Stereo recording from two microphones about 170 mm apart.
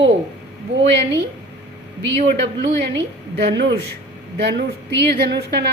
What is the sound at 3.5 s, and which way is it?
A woman's voice, 90° right.